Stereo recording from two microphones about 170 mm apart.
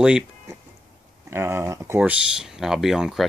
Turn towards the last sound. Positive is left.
turn(degrees=0)  # may be behind; listen again after turning